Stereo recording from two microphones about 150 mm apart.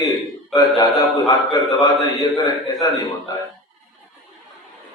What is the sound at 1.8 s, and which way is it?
A man's voice, 25° left (ahead or behind).